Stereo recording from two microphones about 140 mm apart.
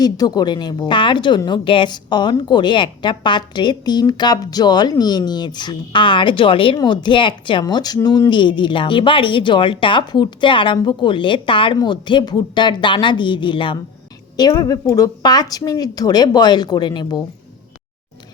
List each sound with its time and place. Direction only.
0.0 s speech: 30° left (ahead or behind)